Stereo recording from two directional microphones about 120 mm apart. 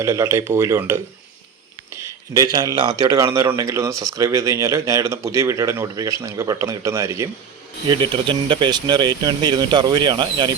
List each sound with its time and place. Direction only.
0.0 s speech: 25° right (ahead or behind)
7.9 s speech: 45° right (ahead or behind)